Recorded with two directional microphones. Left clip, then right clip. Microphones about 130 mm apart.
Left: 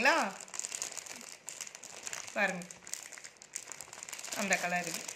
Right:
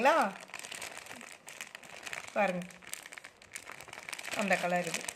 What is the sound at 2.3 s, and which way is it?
Crumpling, 90° right.